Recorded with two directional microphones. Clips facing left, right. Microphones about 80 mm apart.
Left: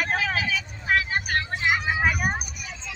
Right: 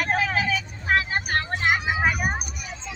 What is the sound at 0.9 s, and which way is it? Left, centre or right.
Vehicle, right.